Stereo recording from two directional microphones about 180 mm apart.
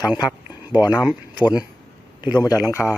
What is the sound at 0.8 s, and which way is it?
Speech, 20° left (ahead or behind).